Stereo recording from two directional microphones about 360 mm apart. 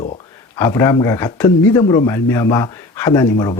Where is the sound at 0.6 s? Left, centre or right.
Centre.